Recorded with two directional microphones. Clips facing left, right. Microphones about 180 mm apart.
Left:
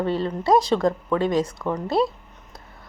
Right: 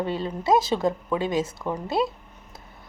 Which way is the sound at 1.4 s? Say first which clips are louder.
Left 3 dB; 25° right (ahead or behind).